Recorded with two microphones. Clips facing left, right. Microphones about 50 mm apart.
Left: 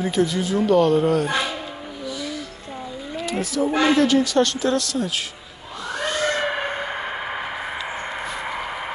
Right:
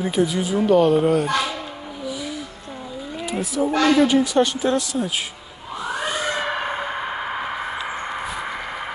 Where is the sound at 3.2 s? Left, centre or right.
Centre.